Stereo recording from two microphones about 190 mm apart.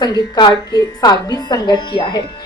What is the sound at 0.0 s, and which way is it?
A woman's voice, 25° left (ahead or behind).